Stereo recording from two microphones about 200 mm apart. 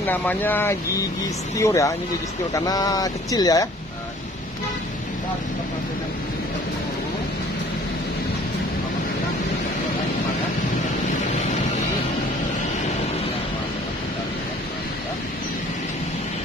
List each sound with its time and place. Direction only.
0.0 s speech: 10° left (ahead or behind)